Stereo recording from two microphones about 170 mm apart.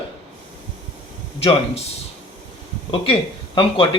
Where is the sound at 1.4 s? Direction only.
35° left (ahead or behind).